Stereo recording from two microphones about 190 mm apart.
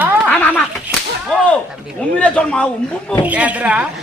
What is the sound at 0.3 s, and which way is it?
Whip, 10° left (ahead or behind).